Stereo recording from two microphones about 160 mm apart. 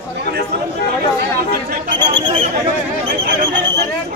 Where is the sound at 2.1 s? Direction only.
30° right (ahead or behind).